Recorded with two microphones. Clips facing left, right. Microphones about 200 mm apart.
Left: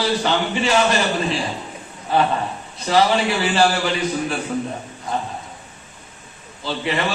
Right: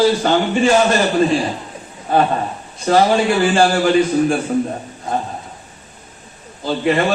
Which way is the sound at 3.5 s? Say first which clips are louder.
Right 4 dB; 50° right (ahead or behind).